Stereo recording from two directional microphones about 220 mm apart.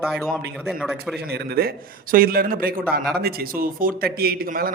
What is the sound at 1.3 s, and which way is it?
A man's voice, 45° right (ahead or behind).